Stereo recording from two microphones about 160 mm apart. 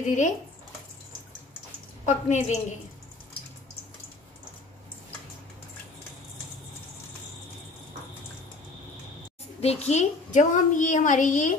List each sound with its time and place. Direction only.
0.0 s a woman's voice: 50° left (ahead or behind)
2.0 s a woman's voice: 45° left (ahead or behind)
9.6 s a woman's voice: 40° left (ahead or behind)